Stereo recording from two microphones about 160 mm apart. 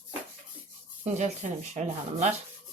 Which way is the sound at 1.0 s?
45° right (ahead or behind).